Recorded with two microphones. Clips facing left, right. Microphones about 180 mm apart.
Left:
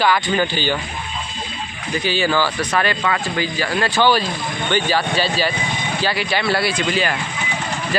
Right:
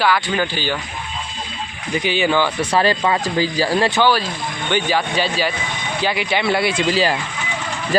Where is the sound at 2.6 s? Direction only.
30° right (ahead or behind).